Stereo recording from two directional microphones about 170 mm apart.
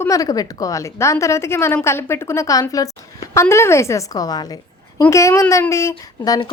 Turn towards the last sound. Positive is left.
turn(degrees=20)  # may be behind; listen again after turning